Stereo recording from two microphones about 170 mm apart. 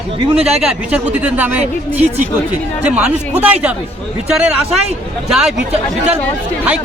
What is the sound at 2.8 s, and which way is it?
Speech, 10° right (ahead or behind).